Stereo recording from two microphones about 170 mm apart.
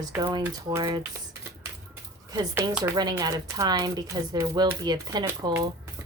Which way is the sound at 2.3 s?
20° right (ahead or behind).